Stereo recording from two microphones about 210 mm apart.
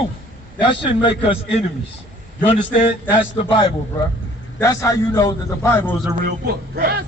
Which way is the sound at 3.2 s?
25° left (ahead or behind).